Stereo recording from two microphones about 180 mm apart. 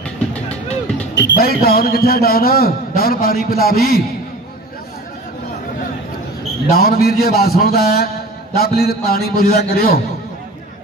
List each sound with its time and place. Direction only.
1.1 s a man's voice: 80° left; by 4.0 s 60° left (ahead or behind)
6.7 s a man's voice: 60° left (ahead or behind)